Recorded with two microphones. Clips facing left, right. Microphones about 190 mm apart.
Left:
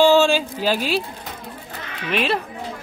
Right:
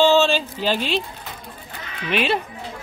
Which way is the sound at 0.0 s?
10° left (ahead or behind).